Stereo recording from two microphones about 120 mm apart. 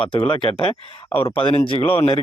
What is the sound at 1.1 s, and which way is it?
Speech, 20° left (ahead or behind).